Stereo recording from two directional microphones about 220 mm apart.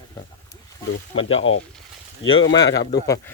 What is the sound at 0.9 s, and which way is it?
Speech, 65° left (ahead or behind).